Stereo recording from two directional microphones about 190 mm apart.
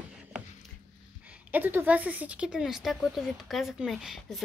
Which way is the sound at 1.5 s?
10° right (ahead or behind).